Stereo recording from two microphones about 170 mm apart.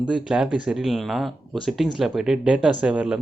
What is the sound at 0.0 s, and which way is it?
Speech, 5° right (ahead or behind).